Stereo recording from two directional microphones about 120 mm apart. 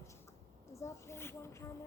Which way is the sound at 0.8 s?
20° left (ahead or behind).